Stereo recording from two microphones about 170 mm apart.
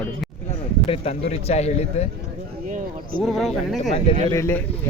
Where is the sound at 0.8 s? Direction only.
35° left (ahead or behind).